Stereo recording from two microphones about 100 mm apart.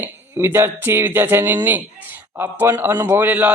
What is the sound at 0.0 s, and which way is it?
A man's voice, 20° right (ahead or behind).